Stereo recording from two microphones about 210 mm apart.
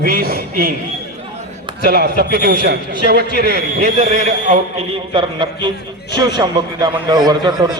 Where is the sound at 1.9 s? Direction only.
45° right (ahead or behind).